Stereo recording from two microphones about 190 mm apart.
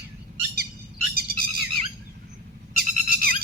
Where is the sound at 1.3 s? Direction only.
55° right (ahead or behind).